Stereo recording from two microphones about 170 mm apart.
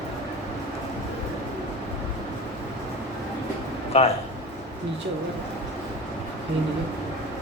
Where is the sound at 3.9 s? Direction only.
35° left (ahead or behind).